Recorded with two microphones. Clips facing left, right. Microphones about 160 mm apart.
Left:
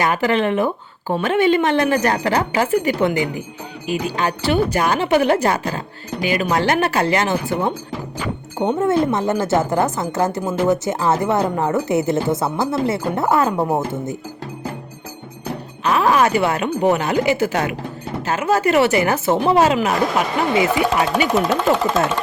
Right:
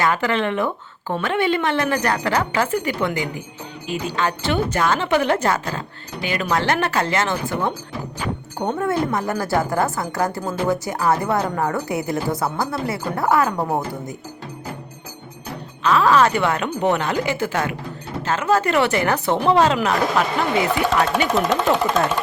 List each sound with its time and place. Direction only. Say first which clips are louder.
0.0 s speech: left 2 dB; 15° left (ahead or behind)
8.5 s speech: left 5 dB; 20° left (ahead or behind)
15.8 s speech: even; 15° left (ahead or behind)